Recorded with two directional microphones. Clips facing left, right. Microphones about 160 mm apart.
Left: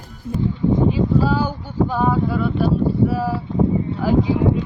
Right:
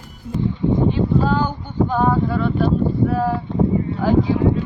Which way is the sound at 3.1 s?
5° left (ahead or behind).